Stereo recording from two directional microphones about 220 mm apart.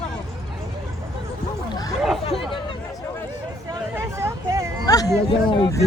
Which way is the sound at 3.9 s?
10° right (ahead or behind).